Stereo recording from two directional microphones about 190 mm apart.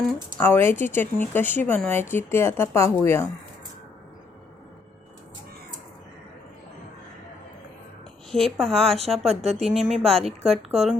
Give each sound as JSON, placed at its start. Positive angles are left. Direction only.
{"t": 0.0, "sound": "speech", "side_deg": 5}
{"t": 8.3, "sound": "a woman's voice", "side_deg": 0}
{"t": 9.2, "sound": "speech", "side_deg": -35}
{"t": 9.6, "sound": "a woman's voice", "side_deg": 0}
{"t": 10.4, "sound": "speech", "side_deg": -35}